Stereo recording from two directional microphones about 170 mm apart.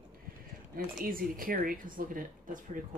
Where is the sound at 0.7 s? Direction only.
60° right (ahead or behind).